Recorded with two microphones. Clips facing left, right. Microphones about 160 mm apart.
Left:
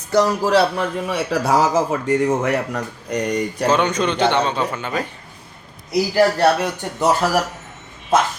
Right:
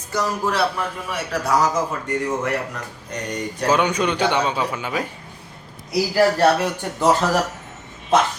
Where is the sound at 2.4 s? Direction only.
65° left (ahead or behind).